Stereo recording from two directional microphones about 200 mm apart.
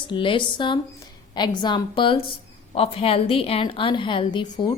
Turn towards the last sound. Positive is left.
turn(degrees=25)  # may be behind; listen again after turning